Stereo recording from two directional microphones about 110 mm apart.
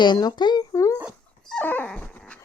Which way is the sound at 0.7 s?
30° left (ahead or behind).